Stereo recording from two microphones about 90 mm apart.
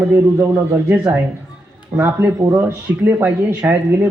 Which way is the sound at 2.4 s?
30° right (ahead or behind).